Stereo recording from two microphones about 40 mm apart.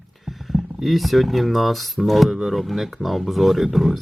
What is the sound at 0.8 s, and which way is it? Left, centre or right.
Speech, centre.